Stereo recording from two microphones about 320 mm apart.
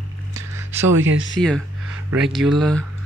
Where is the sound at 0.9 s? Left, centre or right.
Right.